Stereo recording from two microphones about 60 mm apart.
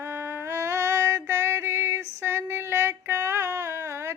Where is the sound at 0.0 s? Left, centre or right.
Right.